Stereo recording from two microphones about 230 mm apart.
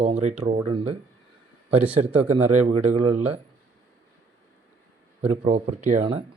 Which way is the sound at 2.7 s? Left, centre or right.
Right.